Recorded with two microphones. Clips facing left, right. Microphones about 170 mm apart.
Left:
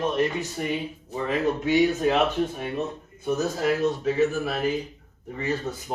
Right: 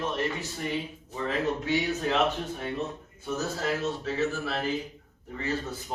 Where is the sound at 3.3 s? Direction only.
15° left (ahead or behind).